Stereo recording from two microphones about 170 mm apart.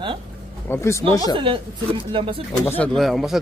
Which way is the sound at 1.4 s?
30° right (ahead or behind).